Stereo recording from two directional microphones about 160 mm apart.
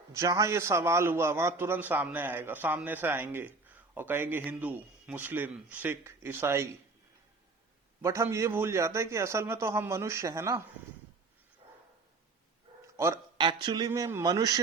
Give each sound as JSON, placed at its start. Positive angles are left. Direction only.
{"t": 0.1, "sound": "a man's voice", "side_deg": -20}
{"t": 8.0, "sound": "a man's voice", "side_deg": -15}
{"t": 11.6, "sound": "dog", "side_deg": -30}
{"t": 13.4, "sound": "speech", "side_deg": -30}